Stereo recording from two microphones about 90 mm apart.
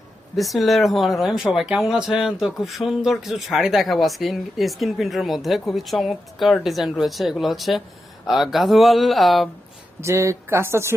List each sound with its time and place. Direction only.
0.3 s speech: centre (ahead or behind)
10.0 s speech: 35° right (ahead or behind)